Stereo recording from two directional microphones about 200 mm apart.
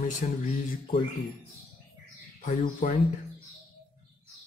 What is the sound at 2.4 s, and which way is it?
Speech, 40° left (ahead or behind).